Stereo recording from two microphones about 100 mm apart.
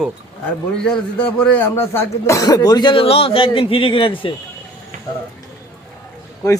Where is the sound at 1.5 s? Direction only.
25° left (ahead or behind); by 2.9 s 40° left (ahead or behind).